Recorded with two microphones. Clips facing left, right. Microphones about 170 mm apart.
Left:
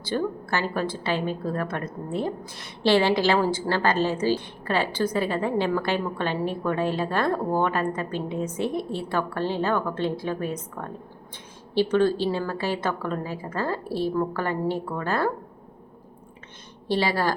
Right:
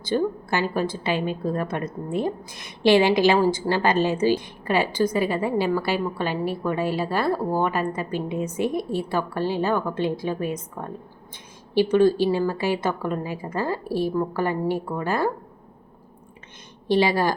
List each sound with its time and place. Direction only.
0.0 s a woman's voice: 15° right (ahead or behind)
16.9 s a woman's voice: 15° right (ahead or behind)